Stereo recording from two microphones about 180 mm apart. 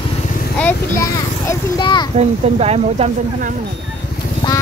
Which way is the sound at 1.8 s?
25° left (ahead or behind).